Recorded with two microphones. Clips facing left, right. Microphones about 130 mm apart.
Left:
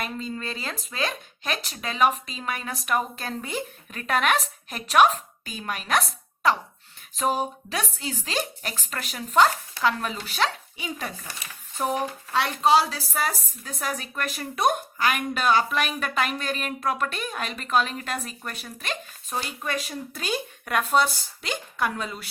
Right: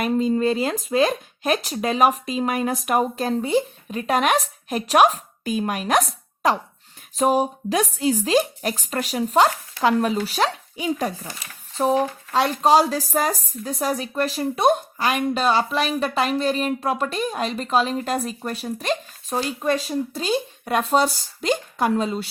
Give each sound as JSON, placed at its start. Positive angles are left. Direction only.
{"t": 0.1, "sound": "speech", "side_deg": -40}